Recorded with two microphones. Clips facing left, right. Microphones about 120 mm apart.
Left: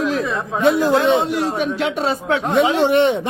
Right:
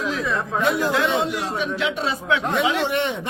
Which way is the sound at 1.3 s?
45° left (ahead or behind).